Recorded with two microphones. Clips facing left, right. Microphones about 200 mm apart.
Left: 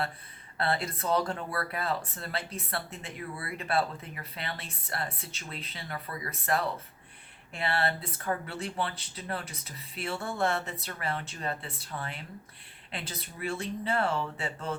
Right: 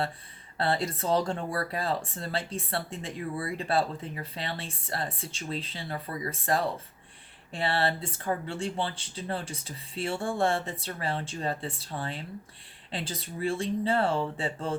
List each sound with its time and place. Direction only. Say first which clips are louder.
0.5 s speech: right 2 dB; 30° right (ahead or behind)